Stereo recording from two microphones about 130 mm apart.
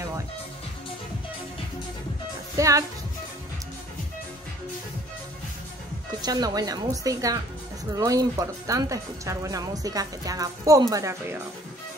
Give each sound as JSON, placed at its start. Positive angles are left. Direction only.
{"t": 2.5, "sound": "music", "side_deg": -25}
{"t": 6.2, "sound": "speech", "side_deg": -30}